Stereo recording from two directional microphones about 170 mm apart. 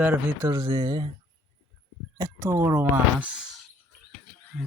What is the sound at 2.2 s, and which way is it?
Speech, 15° right (ahead or behind).